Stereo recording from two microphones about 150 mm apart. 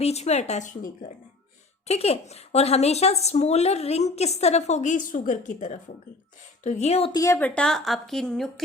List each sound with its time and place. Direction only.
0.0 s a woman's voice: 45° left (ahead or behind)
1.9 s a woman's voice: 45° left (ahead or behind)
7.1 s a woman's voice: 20° left (ahead or behind); by 8.6 s 5° left (ahead or behind)